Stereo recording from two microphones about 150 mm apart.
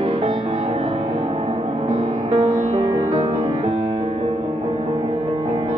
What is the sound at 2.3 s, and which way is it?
Music, 35° right (ahead or behind).